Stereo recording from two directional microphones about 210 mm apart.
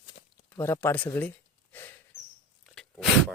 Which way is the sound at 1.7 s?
10° left (ahead or behind).